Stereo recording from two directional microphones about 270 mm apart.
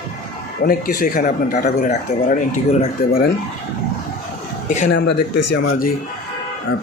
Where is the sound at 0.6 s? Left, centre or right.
Left.